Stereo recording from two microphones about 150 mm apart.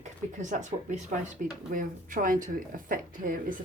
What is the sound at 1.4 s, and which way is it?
Speech, 65° right (ahead or behind).